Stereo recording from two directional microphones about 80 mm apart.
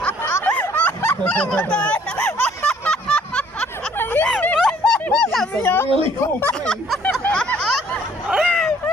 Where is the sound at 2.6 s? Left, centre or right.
Centre.